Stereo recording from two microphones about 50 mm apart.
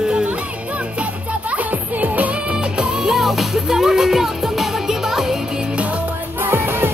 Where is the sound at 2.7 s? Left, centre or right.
Centre.